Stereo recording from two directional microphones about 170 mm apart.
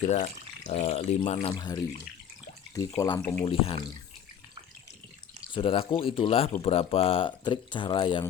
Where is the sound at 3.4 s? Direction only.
30° left (ahead or behind).